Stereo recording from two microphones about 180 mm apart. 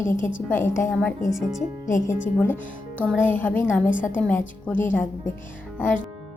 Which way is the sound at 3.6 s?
5° right (ahead or behind).